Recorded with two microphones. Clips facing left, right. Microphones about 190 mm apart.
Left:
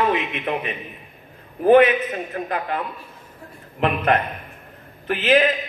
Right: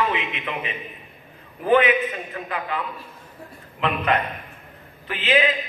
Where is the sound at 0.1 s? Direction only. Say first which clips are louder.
Left 5 dB; 45° left (ahead or behind).